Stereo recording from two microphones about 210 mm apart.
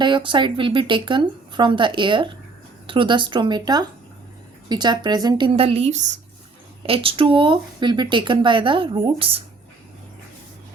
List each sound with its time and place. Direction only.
0.0 s speech: 25° right (ahead or behind)